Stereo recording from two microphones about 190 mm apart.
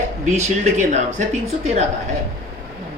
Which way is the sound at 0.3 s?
35° right (ahead or behind).